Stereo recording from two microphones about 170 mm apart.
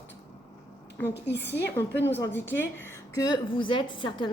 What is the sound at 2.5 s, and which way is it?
Speech, 10° left (ahead or behind).